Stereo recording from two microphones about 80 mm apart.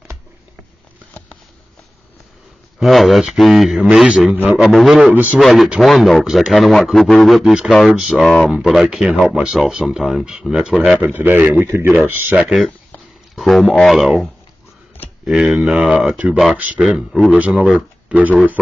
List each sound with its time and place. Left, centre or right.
2.8 s speech: centre
11.0 s speech: right
13.4 s speech: centre
16.5 s speech: centre
16.8 s speech: centre
17.3 s speech: centre